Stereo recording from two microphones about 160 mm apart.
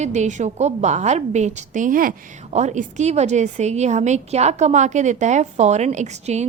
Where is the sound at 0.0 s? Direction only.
45° right (ahead or behind).